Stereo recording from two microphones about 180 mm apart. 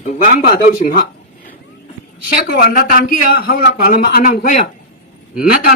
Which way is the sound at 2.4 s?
55° left (ahead or behind).